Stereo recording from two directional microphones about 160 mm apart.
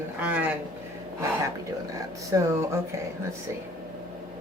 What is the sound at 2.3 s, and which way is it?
Speech, 15° right (ahead or behind).